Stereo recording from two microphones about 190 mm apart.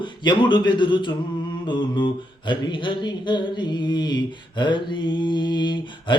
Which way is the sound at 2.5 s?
25° left (ahead or behind).